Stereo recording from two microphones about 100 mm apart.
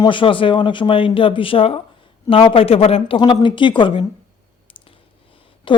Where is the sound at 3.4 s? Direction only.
55° left (ahead or behind).